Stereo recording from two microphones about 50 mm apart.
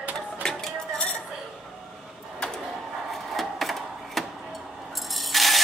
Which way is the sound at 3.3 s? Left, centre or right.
Centre.